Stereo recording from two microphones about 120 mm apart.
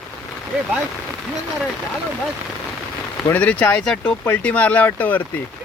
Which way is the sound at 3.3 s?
10° left (ahead or behind).